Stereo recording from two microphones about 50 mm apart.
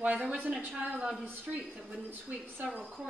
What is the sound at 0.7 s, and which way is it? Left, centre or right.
Speech, centre.